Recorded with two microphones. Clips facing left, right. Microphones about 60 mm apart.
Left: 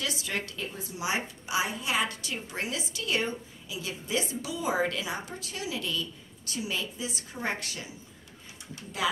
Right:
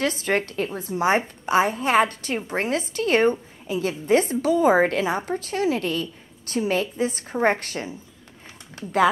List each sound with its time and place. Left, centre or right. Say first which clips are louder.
0.0 s a woman's voice: right 10 dB; right